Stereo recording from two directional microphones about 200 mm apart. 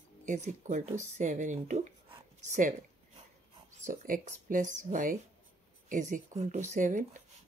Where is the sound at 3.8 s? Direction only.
45° right (ahead or behind).